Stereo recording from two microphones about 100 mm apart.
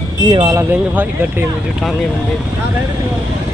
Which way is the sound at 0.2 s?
45° right (ahead or behind).